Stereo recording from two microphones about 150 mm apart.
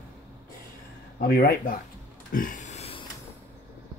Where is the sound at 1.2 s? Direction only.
90° left.